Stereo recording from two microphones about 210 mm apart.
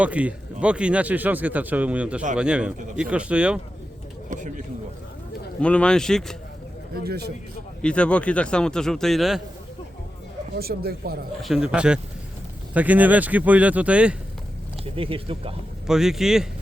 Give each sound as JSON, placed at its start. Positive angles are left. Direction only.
{"t": 0.0, "sound": "speech", "side_deg": -5}
{"t": 4.3, "sound": "speech", "side_deg": -35}
{"t": 5.5, "sound": "speech", "side_deg": 5}
{"t": 6.9, "sound": "speech", "side_deg": -50}
{"t": 7.8, "sound": "speech", "side_deg": 5}
{"t": 10.5, "sound": "speech", "side_deg": -50}
{"t": 11.4, "sound": "speech", "side_deg": -5}
{"t": 14.9, "sound": "speech", "side_deg": -25}
{"t": 15.9, "sound": "speech", "side_deg": 0}